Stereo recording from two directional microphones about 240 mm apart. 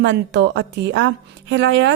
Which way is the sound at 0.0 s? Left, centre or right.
Right.